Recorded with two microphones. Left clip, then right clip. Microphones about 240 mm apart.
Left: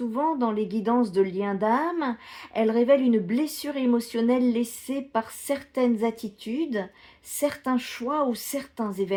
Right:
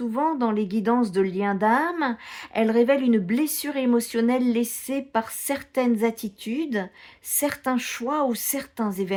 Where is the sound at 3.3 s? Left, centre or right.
Right.